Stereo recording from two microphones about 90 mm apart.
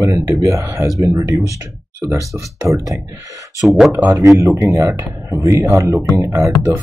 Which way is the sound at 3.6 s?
Centre (ahead or behind).